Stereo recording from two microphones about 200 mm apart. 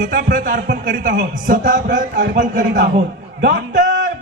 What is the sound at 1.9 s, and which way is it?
Speech, 60° right (ahead or behind).